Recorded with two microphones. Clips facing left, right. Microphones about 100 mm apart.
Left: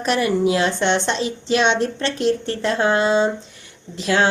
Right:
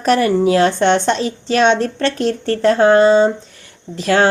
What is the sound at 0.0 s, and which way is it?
Speech, 45° right (ahead or behind).